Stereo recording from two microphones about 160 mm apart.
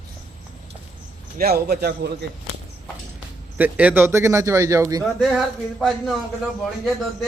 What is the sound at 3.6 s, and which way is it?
A man's voice, 10° right (ahead or behind).